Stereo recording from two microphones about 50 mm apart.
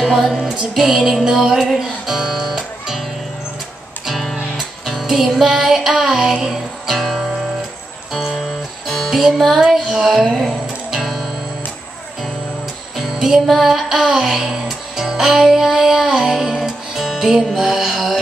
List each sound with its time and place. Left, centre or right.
0.0 s music: centre
0.6 s speech: centre
0.9 s music: centre
1.2 s speech: centre
4.0 s music: centre
10.0 s speech: centre
10.4 s music: centre
12.9 s music: centre
17.6 s speech: centre